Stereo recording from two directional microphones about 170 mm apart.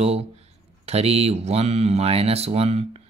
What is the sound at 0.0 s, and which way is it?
Speech, 35° right (ahead or behind).